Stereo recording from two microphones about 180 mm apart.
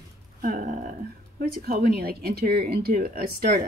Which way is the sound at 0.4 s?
50° right (ahead or behind).